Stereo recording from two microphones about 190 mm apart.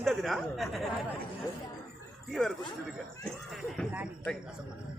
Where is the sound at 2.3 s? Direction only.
Centre (ahead or behind).